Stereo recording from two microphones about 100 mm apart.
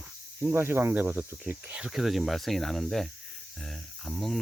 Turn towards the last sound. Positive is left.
turn(degrees=0)  # may be behind; listen again after turning